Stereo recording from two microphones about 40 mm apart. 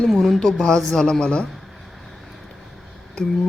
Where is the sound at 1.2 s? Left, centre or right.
Left.